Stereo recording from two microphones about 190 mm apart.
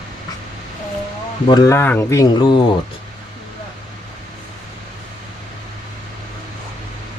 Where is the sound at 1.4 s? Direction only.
20° left (ahead or behind).